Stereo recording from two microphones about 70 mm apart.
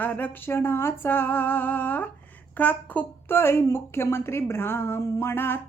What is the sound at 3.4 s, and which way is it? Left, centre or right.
A woman's voice, left.